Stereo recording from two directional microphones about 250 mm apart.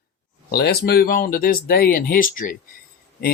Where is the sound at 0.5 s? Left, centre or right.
Left.